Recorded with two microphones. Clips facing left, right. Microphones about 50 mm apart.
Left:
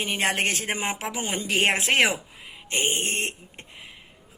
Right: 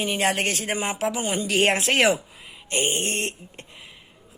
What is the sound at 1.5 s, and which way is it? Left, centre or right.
Speech, centre.